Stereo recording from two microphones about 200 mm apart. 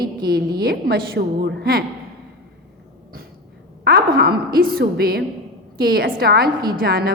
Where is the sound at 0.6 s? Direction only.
50° right (ahead or behind).